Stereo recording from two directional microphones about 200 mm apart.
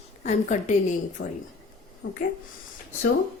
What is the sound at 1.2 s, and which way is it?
Speech, 60° left (ahead or behind).